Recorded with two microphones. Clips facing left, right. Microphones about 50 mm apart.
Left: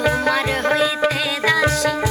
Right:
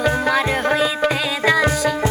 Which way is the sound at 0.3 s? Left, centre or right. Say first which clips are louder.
Right 1 dB; centre.